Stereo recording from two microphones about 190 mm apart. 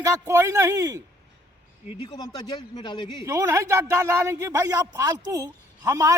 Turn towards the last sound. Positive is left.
turn(degrees=-15)  # may be behind; listen again after turning